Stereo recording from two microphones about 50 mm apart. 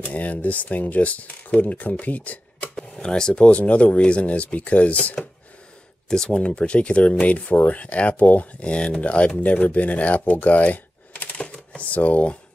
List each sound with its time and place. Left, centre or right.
0.0 s speech: left
2.7 s a sound: centre
3.4 s speech: left
6.0 s speech: centre; by 8.5 s left
8.5 s speech: left
11.3 s typewriter: left